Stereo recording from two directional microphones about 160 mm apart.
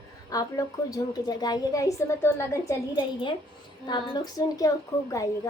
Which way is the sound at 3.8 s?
25° left (ahead or behind).